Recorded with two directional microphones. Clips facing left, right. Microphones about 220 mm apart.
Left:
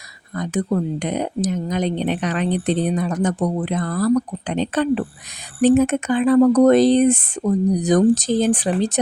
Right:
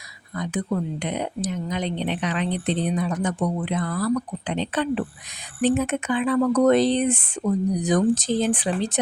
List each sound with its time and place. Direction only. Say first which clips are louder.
0.3 s speech: left 4 dB; 45° left (ahead or behind)